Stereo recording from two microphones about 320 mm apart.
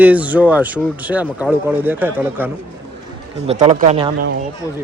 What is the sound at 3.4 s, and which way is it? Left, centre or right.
Speech, right.